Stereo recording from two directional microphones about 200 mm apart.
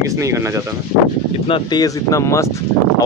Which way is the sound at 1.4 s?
25° left (ahead or behind).